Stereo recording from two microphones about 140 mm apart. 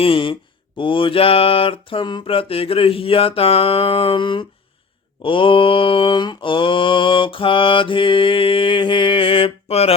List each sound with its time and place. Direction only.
0.0 s mantra: 40° left (ahead or behind)